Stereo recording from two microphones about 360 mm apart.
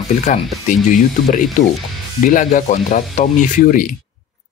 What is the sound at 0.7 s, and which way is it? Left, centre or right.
Speech, left.